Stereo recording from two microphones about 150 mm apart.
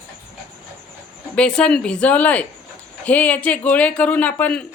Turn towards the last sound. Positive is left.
turn(degrees=10)  # may be behind; listen again after turning